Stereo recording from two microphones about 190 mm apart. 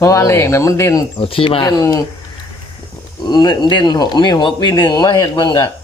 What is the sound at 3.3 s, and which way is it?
Speech, 20° left (ahead or behind).